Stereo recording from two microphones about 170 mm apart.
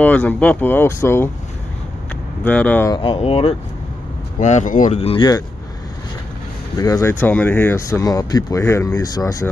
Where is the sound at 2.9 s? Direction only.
30° left (ahead or behind).